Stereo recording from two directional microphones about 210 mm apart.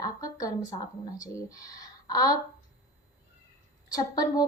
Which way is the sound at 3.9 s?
20° left (ahead or behind).